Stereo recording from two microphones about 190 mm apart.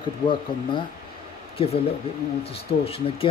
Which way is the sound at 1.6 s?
30° left (ahead or behind).